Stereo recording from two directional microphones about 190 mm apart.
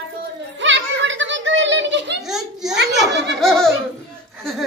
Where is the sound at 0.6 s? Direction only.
75° right (ahead or behind).